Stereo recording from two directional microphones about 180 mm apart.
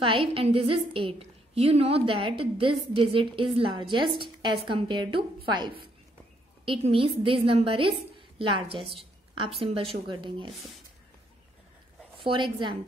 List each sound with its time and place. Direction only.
0.0 s a woman's voice: 30° right (ahead or behind)
12.2 s a woman's voice: 25° right (ahead or behind)